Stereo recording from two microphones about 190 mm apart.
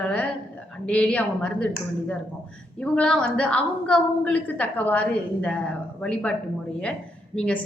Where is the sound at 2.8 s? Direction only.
5° left (ahead or behind).